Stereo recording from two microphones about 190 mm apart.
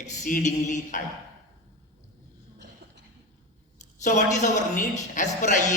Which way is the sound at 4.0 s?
40° left (ahead or behind).